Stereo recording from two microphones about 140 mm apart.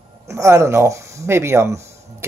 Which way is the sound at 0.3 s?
20° right (ahead or behind).